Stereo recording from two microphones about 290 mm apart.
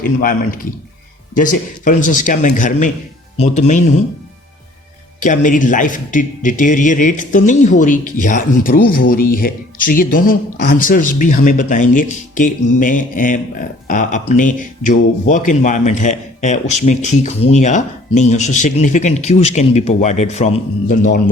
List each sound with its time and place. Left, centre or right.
0.0 s a man's voice: left
5.2 s a man's voice: left